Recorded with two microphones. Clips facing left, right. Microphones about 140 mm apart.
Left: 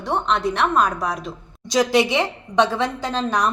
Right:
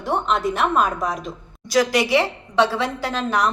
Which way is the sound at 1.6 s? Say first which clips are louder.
Left 1 dB; 25° left (ahead or behind).